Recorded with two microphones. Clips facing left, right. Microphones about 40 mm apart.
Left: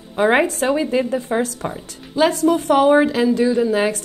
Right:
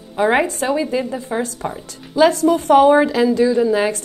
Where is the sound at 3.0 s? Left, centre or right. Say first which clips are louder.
Right 1 dB; centre.